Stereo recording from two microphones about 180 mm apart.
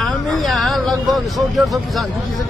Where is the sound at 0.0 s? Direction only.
Centre (ahead or behind).